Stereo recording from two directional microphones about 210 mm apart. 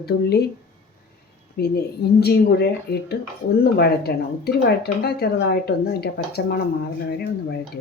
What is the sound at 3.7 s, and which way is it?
A woman's voice, 50° left (ahead or behind).